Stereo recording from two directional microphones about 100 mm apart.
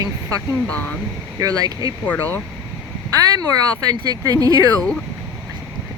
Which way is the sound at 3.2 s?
40° right (ahead or behind).